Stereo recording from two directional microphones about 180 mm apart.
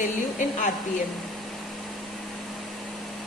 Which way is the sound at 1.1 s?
Centre (ahead or behind).